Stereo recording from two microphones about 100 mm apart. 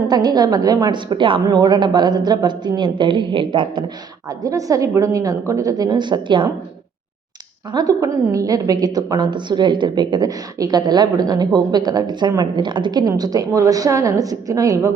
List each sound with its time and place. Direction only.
0.1 s a woman's voice: 45° right (ahead or behind)
4.3 s a woman's voice: 35° right (ahead or behind); by 6.5 s 50° right (ahead or behind)
7.7 s a woman's voice: 40° right (ahead or behind)